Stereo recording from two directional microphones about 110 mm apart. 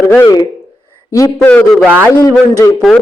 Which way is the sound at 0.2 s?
35° left (ahead or behind).